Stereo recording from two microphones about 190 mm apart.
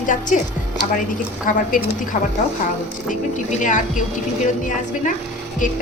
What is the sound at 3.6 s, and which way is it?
Speech, 40° left (ahead or behind).